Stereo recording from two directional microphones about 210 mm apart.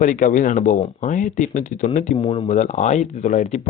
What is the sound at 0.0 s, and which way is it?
Speech, 40° left (ahead or behind).